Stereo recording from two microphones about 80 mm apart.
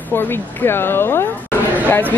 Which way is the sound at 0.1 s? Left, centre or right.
Left.